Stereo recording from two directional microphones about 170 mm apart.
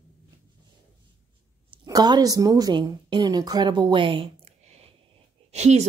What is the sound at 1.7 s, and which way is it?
A woman's voice, 25° right (ahead or behind).